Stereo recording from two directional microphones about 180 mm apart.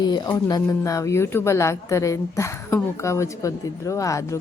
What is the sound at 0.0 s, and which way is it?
A woman's voice, 25° left (ahead or behind).